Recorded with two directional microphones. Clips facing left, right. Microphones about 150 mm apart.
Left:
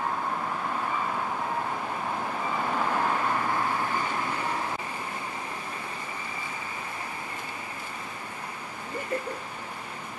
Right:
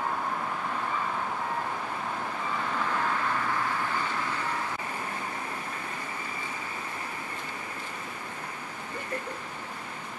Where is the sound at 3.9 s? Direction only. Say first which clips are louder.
Left 2 dB; 15° left (ahead or behind).